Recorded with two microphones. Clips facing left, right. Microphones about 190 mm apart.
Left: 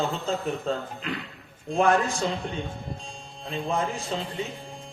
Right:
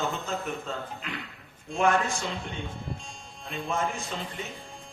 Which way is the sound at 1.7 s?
35° left (ahead or behind).